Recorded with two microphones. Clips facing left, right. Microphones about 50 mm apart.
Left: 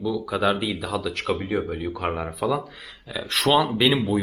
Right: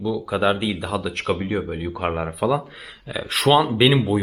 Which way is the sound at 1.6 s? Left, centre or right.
Centre.